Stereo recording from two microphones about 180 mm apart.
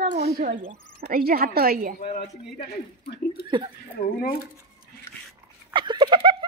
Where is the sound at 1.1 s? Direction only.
55° right (ahead or behind).